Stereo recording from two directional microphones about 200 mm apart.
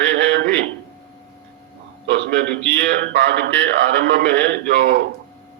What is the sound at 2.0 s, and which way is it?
A man's voice, 60° right (ahead or behind).